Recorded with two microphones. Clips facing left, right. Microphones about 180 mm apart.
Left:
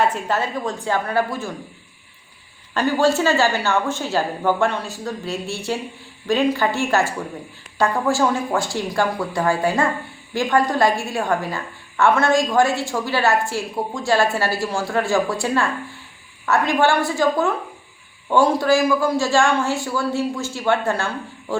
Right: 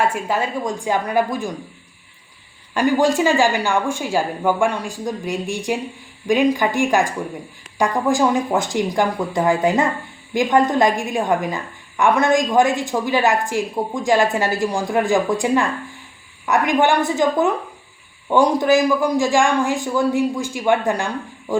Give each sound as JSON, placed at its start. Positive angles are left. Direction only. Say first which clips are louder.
{"t": 0.0, "sound": "a woman's voice", "louder": "even", "side_deg": -10}
{"t": 2.7, "sound": "a woman's voice", "louder": "right 2 dB", "side_deg": -15}